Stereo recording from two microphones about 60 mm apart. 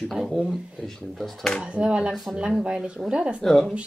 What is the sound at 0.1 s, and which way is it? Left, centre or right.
Speech, centre.